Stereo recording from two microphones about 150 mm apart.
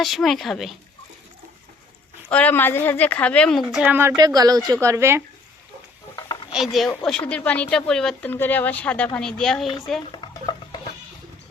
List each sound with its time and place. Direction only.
0.0 s speech: centre (ahead or behind)
2.3 s speech: 10° left (ahead or behind)
3.8 s speech: 15° right (ahead or behind)
4.2 s a woman's voice: 25° right (ahead or behind)
6.5 s speech: centre (ahead or behind)
10.2 s stir: 30° left (ahead or behind)